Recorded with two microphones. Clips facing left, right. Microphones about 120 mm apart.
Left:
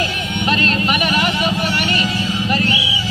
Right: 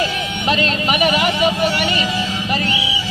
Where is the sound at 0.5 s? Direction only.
15° right (ahead or behind).